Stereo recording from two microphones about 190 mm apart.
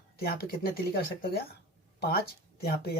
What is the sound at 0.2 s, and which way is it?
Speech, 55° left (ahead or behind).